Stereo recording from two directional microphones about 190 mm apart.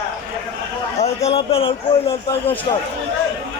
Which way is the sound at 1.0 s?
35° left (ahead or behind).